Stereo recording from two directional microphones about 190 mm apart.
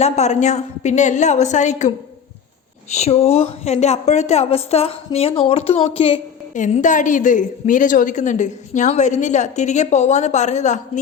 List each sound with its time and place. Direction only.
0.0 s a woman's voice: 35° left (ahead or behind)
2.9 s a woman's voice: 35° left (ahead or behind)